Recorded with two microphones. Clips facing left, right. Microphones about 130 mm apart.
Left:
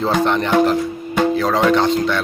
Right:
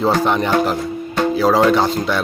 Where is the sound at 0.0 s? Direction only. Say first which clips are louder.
Right 1 dB; 5° right (ahead or behind).